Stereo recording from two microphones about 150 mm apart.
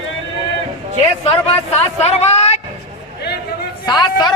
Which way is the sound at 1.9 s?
45° left (ahead or behind).